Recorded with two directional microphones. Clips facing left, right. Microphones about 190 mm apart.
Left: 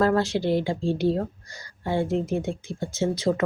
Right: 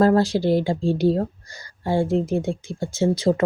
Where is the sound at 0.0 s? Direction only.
35° right (ahead or behind).